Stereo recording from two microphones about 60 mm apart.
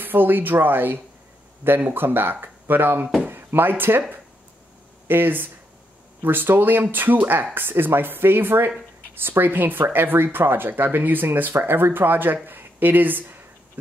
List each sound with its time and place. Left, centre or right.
0.0 s speech: right
5.0 s speech: right